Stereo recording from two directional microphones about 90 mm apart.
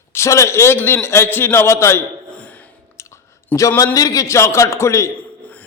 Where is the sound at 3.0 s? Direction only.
30° left (ahead or behind).